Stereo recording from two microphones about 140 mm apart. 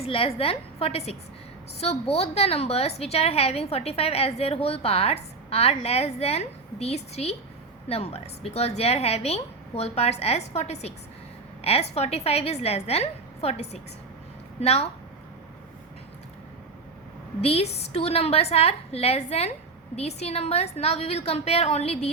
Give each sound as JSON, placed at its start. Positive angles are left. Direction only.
{"t": 0.0, "sound": "a woman's voice", "side_deg": 45}
{"t": 17.4, "sound": "a woman's voice", "side_deg": 45}